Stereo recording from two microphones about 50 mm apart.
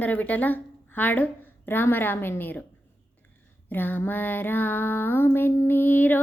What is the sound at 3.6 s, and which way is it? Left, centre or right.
Speech, left.